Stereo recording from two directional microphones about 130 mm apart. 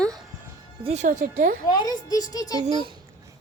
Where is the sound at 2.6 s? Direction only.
45° right (ahead or behind).